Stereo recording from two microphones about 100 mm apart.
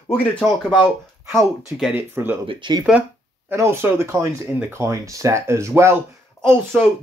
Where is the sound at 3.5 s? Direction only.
25° right (ahead or behind).